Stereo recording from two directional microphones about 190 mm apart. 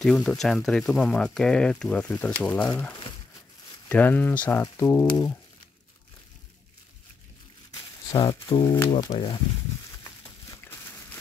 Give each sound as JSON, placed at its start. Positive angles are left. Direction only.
{"t": 0.0, "sound": "speech", "side_deg": 5}
{"t": 3.9, "sound": "speech", "side_deg": 10}
{"t": 8.1, "sound": "speech", "side_deg": 25}